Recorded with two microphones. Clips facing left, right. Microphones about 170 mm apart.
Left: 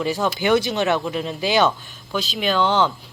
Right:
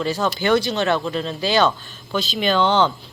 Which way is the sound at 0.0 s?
15° left (ahead or behind).